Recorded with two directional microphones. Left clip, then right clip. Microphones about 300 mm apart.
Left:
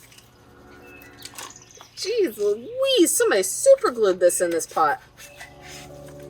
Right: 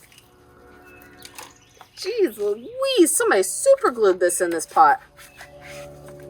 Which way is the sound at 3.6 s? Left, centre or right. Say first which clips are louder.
Left 1 dB; centre.